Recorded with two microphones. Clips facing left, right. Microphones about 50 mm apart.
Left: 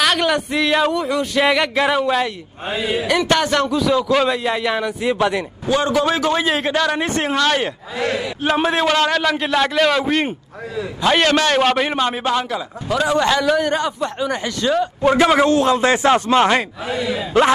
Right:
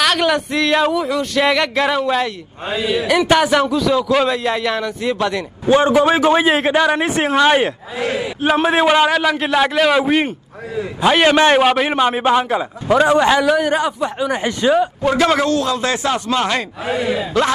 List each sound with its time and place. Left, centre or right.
0.0 s speech: centre
2.7 s speech: centre
3.1 s a man's voice: centre
3.7 s speech: centre
5.7 s a man's voice: right
8.0 s a man's voice: right
8.6 s a man's voice: centre
15.4 s speech: left
16.8 s speech: right